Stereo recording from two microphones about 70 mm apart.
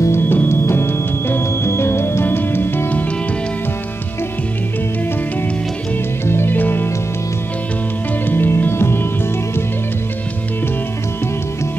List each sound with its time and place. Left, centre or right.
0.0 s music: left
6.2 s music: left
8.3 s music: left